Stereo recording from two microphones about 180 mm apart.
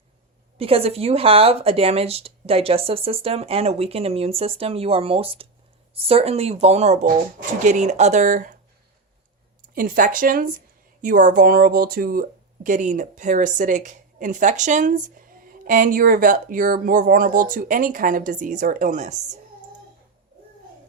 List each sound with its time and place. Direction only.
0.5 s speech: 30° right (ahead or behind)
9.7 s speech: 50° right (ahead or behind)